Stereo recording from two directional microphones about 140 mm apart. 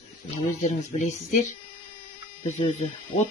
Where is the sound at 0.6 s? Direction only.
55° left (ahead or behind).